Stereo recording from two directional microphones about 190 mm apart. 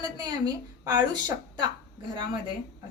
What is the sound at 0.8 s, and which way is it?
Speech, 20° right (ahead or behind).